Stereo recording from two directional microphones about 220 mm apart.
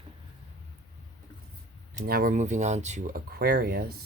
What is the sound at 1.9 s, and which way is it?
Speech, 40° right (ahead or behind).